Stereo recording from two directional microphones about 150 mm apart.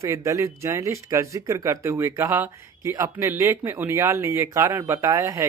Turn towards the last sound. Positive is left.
turn(degrees=-20)  # may be behind; listen again after turning